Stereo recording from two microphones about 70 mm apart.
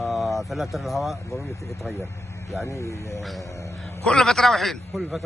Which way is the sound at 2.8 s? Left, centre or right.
Left.